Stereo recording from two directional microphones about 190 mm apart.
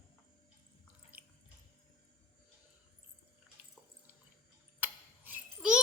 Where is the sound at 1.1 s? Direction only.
10° right (ahead or behind).